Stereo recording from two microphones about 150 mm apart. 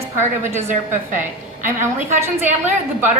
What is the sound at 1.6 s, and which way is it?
Speech, 15° right (ahead or behind).